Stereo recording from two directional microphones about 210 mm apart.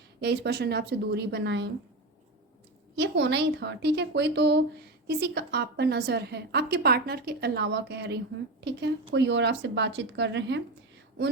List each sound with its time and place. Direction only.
0.2 s a woman's voice: 50° right (ahead or behind)
2.9 s a woman's voice: 55° right (ahead or behind)